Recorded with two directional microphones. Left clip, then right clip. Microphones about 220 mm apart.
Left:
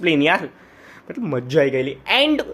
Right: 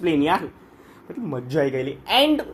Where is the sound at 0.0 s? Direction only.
30° left (ahead or behind).